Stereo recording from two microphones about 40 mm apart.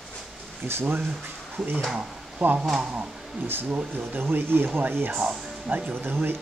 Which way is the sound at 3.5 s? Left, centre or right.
Right.